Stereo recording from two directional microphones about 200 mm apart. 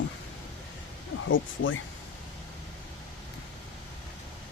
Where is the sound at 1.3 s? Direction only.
75° left (ahead or behind).